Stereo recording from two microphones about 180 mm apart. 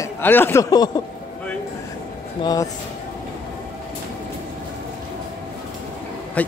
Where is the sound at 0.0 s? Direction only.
10° left (ahead or behind).